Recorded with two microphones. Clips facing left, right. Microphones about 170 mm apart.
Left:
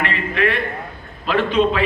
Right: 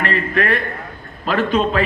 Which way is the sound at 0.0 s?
40° right (ahead or behind).